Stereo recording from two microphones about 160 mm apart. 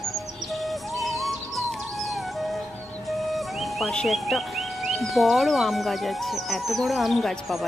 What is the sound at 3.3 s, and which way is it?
Speech, centre (ahead or behind).